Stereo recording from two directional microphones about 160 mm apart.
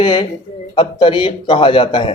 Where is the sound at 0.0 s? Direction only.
30° left (ahead or behind).